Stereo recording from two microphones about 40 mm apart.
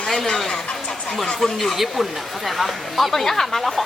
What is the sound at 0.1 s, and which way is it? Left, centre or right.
Speech, centre.